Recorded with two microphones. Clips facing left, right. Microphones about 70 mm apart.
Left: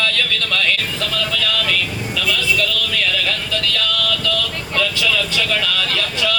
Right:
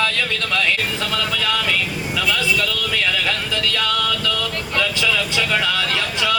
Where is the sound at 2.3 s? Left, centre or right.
Right.